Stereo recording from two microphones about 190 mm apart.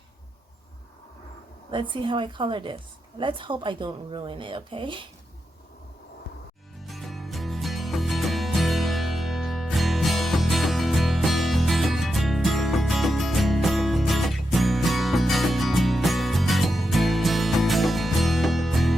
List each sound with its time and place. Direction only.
1.7 s a woman's voice: 25° right (ahead or behind)
6.8 s music: centre (ahead or behind)